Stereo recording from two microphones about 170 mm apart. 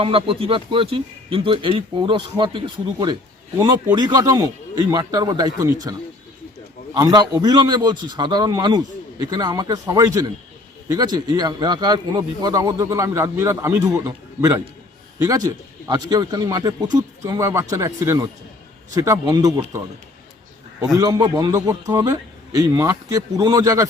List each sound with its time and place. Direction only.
0.0 s a man's voice: 30° right (ahead or behind)
6.9 s a man's voice: 25° right (ahead or behind)
15.9 s a man's voice: 25° right (ahead or behind)
20.9 s a man's voice: 20° right (ahead or behind)